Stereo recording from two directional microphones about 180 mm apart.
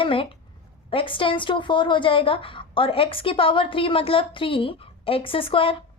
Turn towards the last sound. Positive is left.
turn(degrees=30)  # may be behind; listen again after turning